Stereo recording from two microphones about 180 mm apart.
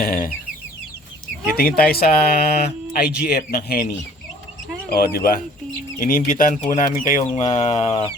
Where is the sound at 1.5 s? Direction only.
55° left (ahead or behind).